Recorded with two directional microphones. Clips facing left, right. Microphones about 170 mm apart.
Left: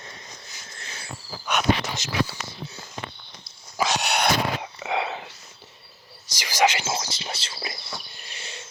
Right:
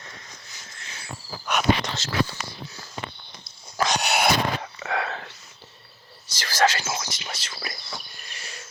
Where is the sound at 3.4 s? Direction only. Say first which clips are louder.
Even; 5° left (ahead or behind).